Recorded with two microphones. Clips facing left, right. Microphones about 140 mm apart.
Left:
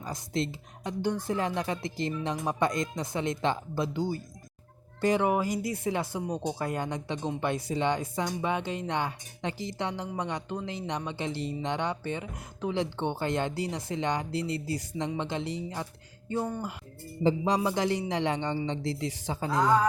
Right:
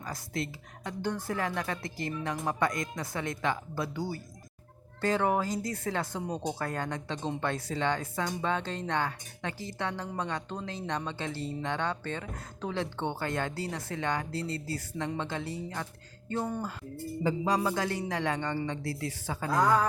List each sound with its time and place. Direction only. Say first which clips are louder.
0.0 s a woman's voice: left 4 dB; 20° left (ahead or behind)
17.2 s a woman's voice: left 3 dB; 20° left (ahead or behind)